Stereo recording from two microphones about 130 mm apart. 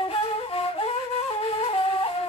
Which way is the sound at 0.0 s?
45° left (ahead or behind).